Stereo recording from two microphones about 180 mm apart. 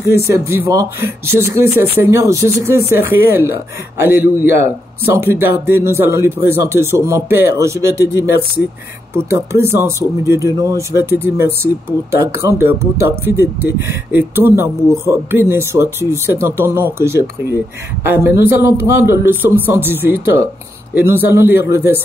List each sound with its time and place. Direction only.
0.0 s speech: 65° left (ahead or behind)
0.3 s speech: 15° right (ahead or behind)